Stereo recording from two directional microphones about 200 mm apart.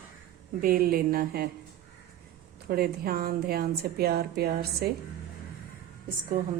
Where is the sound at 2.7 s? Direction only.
50° right (ahead or behind).